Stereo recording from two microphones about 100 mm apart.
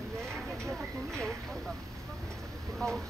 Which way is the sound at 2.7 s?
5° left (ahead or behind).